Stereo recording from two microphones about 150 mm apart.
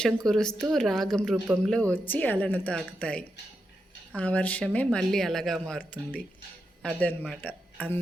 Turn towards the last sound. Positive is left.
turn(degrees=10)  # may be behind; listen again after turning